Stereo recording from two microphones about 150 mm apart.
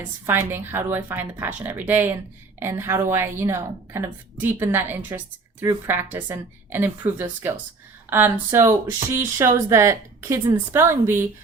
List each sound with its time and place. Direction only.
0.3 s a woman's voice: 15° right (ahead or behind)